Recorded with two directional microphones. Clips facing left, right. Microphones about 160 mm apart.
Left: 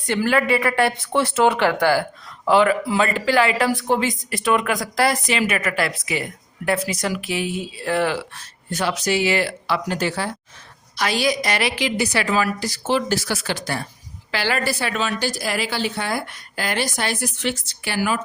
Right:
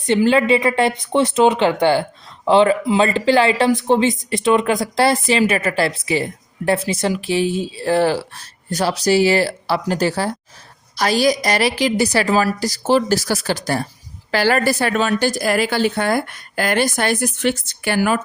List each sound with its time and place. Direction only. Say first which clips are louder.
0.0 s a woman's voice: right 5 dB; 20° right (ahead or behind); by 18.2 s 50° right (ahead or behind)